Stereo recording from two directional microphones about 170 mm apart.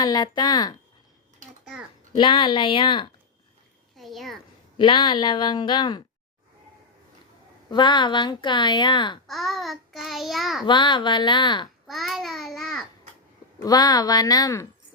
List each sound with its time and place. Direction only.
0.0 s a woman's voice: 25° left (ahead or behind)
2.1 s a woman's voice: 30° left (ahead or behind)
3.9 s a child's voice: centre (ahead or behind)
4.8 s a woman's voice: 30° left (ahead or behind)
7.7 s a woman's voice: 25° left (ahead or behind)
9.2 s a child's voice: centre (ahead or behind)
10.7 s a woman's voice: 25° left (ahead or behind)
11.9 s a child's voice: centre (ahead or behind)
13.6 s a woman's voice: 20° left (ahead or behind)